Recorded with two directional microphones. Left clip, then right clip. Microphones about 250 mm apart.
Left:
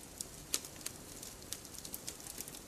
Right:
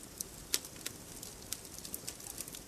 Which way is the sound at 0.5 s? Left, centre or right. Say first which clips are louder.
Right 3 dB; centre.